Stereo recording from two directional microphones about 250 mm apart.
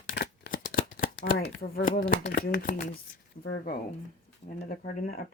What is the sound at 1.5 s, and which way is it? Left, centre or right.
Speech, left.